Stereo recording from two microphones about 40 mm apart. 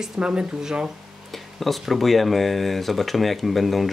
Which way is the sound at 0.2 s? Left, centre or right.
Right.